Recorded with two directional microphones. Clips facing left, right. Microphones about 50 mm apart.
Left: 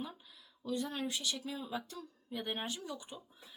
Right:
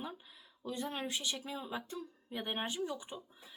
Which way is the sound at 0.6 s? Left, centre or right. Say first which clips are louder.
Left 2 dB; right.